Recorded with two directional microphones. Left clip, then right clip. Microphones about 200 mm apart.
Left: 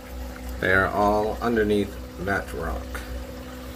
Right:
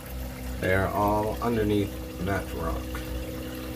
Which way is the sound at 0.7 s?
15° left (ahead or behind).